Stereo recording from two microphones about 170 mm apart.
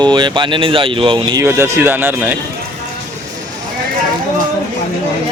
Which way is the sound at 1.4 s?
15° right (ahead or behind).